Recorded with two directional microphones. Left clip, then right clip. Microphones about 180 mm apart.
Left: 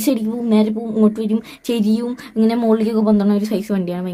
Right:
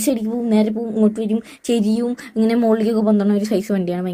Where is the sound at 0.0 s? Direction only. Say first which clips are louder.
Left 1 dB; 10° right (ahead or behind).